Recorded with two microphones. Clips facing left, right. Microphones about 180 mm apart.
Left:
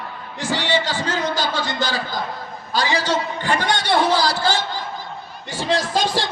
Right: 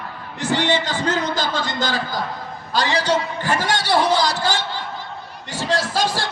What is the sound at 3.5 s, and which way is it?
Speech, 5° right (ahead or behind).